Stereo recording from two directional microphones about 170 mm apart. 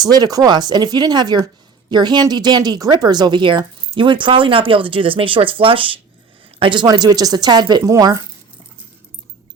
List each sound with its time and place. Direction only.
0.0 s speech: 25° right (ahead or behind)